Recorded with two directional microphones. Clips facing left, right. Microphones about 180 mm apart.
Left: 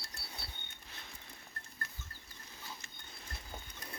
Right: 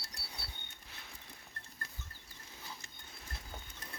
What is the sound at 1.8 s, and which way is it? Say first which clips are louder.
Livestock: left 1 dB; 35° right (ahead or behind).